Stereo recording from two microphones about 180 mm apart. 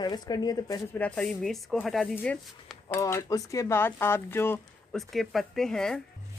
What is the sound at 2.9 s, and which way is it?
Speech, 15° left (ahead or behind).